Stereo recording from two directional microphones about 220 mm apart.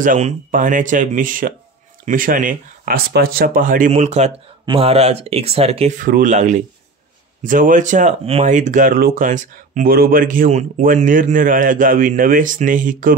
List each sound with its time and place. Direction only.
0.0 s speech: 35° right (ahead or behind)